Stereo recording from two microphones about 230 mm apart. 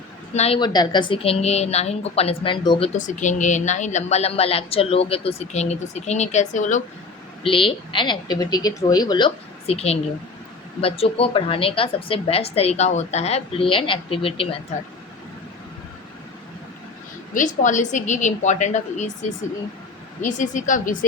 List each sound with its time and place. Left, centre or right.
0.3 s a woman's voice: left
17.3 s a woman's voice: left
20.2 s a woman's voice: left